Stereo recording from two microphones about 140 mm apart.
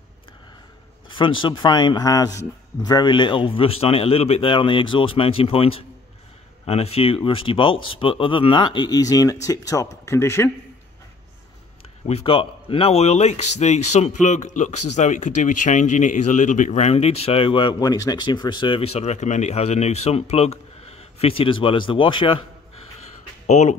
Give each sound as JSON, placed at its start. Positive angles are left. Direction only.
{"t": 1.0, "sound": "a man's voice", "side_deg": 35}
{"t": 12.1, "sound": "speech", "side_deg": 45}
{"t": 23.4, "sound": "speech", "side_deg": 55}